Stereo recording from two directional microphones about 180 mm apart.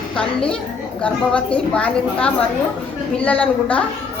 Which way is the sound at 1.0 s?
5° left (ahead or behind).